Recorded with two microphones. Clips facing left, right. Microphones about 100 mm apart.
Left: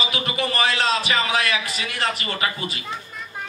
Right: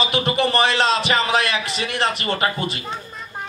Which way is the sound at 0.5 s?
25° right (ahead or behind).